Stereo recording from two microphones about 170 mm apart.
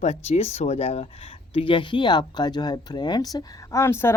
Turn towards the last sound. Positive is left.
turn(degrees=15)  # may be behind; listen again after turning